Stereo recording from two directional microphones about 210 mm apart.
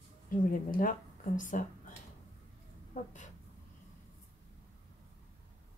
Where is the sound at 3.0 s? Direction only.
35° left (ahead or behind).